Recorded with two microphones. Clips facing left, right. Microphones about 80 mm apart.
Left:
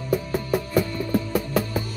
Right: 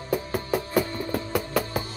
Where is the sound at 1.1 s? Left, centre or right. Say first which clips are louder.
Left 4 dB; right.